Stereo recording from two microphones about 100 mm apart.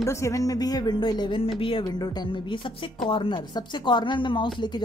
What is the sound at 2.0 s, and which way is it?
A woman's voice, 50° left (ahead or behind).